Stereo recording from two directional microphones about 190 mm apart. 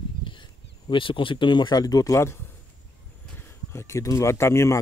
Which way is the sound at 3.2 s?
10° left (ahead or behind).